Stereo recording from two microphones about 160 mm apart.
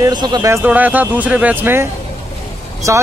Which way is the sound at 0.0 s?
25° right (ahead or behind).